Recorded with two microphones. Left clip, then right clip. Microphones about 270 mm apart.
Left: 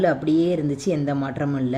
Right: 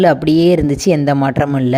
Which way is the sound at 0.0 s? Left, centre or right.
Right.